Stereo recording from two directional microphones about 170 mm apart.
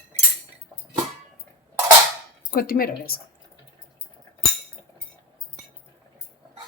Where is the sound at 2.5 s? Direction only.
60° left (ahead or behind).